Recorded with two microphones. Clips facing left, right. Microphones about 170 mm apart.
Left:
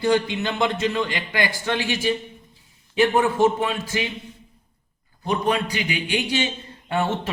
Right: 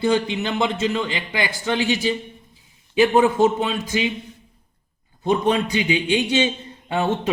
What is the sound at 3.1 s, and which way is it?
Speech, 20° right (ahead or behind).